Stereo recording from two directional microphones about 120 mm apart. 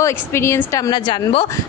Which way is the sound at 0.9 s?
40° left (ahead or behind).